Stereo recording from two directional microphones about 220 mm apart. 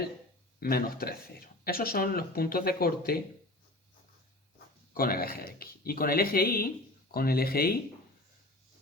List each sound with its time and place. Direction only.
0.6 s speech: 40° left (ahead or behind)
4.9 s speech: 40° left (ahead or behind)